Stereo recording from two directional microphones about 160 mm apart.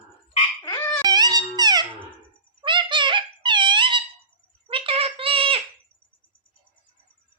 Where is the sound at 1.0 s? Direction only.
25° right (ahead or behind).